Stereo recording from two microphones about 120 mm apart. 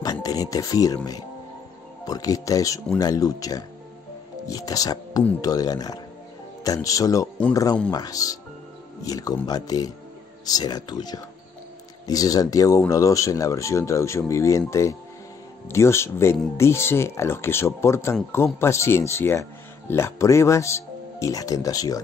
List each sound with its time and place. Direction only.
0.0 s speech: 30° left (ahead or behind)